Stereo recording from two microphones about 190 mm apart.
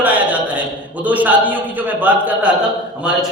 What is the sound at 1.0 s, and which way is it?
A man's voice, 10° right (ahead or behind).